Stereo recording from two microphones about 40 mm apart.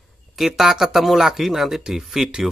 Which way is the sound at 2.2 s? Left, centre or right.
Right.